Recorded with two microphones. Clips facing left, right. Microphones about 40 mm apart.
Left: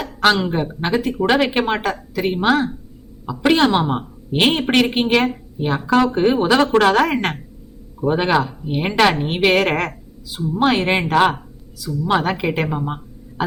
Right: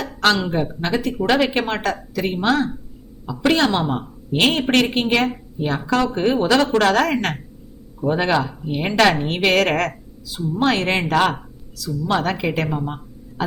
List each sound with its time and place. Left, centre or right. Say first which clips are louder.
0.0 s a woman's voice: left 2 dB; centre
4.6 s speech: left 1 dB; centre
4.9 s a woman's voice: left 2 dB; centre